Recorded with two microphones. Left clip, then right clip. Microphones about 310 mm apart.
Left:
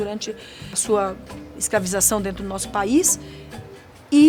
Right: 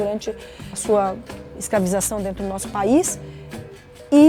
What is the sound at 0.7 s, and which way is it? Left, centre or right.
A woman's voice, right.